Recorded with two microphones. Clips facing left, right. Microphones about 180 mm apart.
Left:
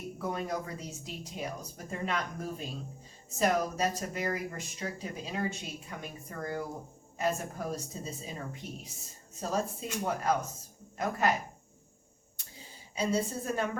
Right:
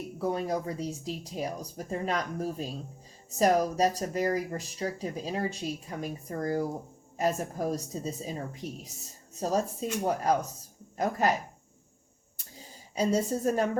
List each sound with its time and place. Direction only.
0.2 s speech: 30° right (ahead or behind)
12.5 s a woman's voice: 40° right (ahead or behind)